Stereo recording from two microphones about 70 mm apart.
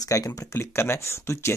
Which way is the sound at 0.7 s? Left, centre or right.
Left.